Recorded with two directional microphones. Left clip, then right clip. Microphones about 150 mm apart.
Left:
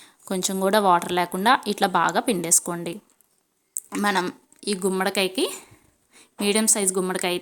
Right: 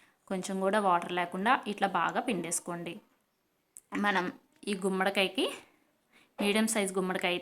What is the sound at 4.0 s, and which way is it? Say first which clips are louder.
Speech: left 7 dB; 40° left (ahead or behind).